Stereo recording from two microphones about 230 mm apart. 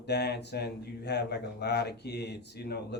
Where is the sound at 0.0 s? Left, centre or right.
Left.